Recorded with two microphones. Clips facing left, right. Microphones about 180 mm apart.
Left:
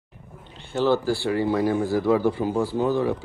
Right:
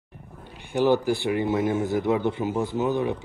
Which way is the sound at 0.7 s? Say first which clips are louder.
Even; 15° right (ahead or behind).